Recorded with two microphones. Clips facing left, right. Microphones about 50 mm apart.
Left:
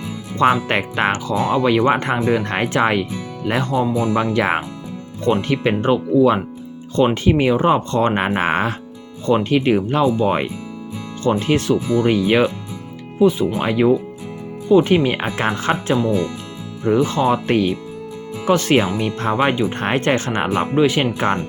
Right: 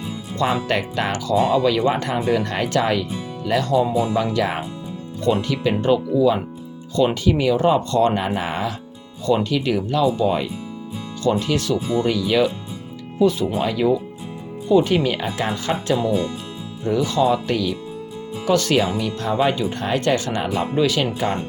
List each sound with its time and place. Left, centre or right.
0.7 s speech: left
3.9 s speech: left
9.2 s speech: left
13.1 s speech: left
13.6 s speech: left
20.7 s speech: left